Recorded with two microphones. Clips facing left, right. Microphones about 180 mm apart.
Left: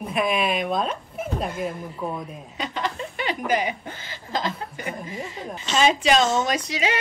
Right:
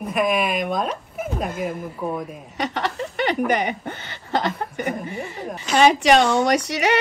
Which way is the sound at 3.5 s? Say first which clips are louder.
Right 2 dB; 65° right (ahead or behind).